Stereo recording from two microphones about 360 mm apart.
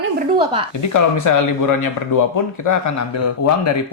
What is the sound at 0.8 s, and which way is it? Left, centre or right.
Speech, left.